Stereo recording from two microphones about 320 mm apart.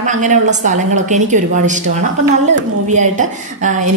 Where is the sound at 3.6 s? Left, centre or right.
Right.